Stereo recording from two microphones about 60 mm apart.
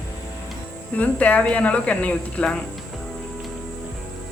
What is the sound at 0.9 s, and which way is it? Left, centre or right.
Speech, left.